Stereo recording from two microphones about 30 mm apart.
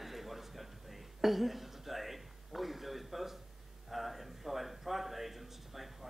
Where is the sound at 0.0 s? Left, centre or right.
Centre.